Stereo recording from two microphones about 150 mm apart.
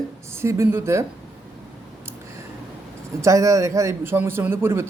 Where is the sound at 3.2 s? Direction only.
20° right (ahead or behind).